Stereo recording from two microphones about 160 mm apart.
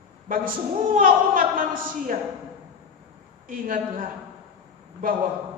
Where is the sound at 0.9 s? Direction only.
60° right (ahead or behind).